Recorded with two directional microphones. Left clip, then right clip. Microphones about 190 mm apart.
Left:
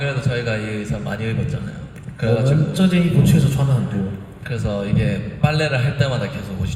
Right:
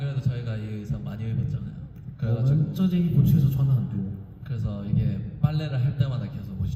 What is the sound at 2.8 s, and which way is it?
Speech, 15° right (ahead or behind).